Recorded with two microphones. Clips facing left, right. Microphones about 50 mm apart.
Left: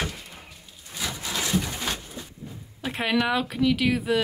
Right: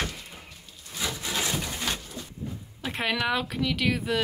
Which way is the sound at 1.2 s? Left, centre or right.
Right.